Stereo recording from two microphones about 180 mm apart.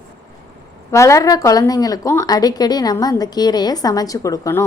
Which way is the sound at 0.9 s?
15° left (ahead or behind).